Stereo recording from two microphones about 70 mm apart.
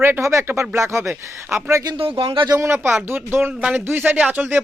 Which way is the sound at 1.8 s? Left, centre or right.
Right.